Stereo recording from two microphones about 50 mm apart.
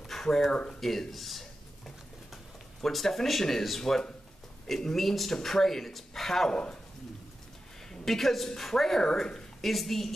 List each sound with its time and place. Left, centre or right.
0.0 s a sound: centre
0.5 s speech: centre
0.7 s a woman's voice: centre
1.9 s a sound: centre
4.6 s speech: centre
7.9 s a woman's voice: centre